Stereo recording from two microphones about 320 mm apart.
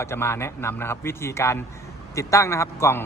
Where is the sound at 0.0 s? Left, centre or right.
Centre.